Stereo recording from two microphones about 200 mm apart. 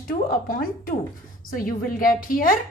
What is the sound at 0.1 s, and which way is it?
A woman's voice, 45° left (ahead or behind).